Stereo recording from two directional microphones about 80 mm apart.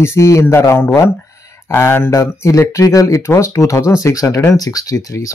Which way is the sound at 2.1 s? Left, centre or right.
Left.